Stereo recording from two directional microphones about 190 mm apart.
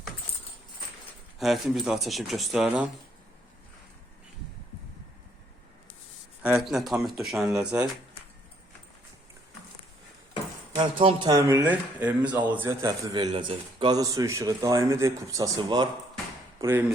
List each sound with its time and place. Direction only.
1.4 s speech: centre (ahead or behind)
6.4 s speech: 5° right (ahead or behind)
11.0 s speech: 20° right (ahead or behind)